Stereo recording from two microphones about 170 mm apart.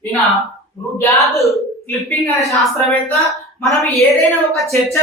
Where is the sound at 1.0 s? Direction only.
20° left (ahead or behind).